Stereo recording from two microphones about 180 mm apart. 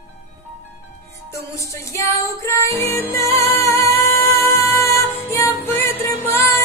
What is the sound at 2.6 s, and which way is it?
Music, 15° left (ahead or behind).